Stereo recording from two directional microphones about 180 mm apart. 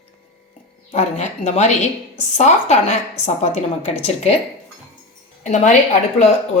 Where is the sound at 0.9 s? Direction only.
40° left (ahead or behind).